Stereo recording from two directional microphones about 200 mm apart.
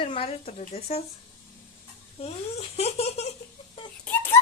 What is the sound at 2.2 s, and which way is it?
Speech, 30° left (ahead or behind).